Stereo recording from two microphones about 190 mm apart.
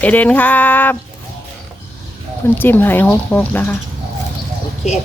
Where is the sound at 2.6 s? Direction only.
10° left (ahead or behind).